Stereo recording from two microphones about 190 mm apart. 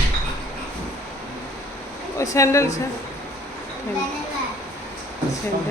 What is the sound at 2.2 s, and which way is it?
Speech, 15° left (ahead or behind).